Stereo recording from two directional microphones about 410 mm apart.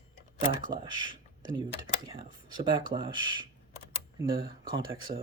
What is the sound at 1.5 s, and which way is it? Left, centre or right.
Speech, centre.